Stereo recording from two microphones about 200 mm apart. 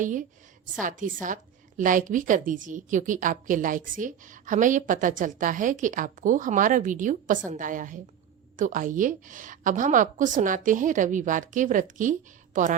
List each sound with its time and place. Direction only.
0.0 s a woman's voice: 40° right (ahead or behind)